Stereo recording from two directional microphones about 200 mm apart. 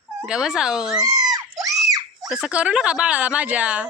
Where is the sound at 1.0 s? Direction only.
20° right (ahead or behind).